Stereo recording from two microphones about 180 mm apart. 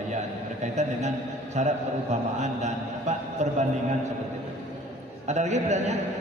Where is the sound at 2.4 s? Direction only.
40° right (ahead or behind).